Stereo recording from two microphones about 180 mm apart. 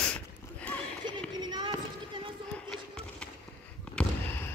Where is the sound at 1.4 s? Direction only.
25° right (ahead or behind).